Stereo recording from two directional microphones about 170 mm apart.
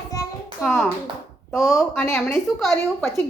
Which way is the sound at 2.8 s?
15° left (ahead or behind).